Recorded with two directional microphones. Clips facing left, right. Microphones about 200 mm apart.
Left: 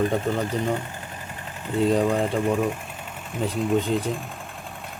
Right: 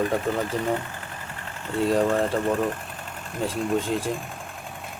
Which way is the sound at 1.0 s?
20° left (ahead or behind).